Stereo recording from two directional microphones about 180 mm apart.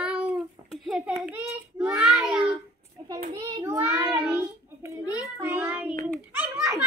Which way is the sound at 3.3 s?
20° right (ahead or behind).